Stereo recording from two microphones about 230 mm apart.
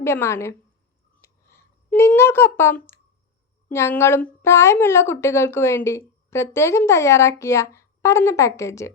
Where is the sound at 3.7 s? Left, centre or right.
Centre.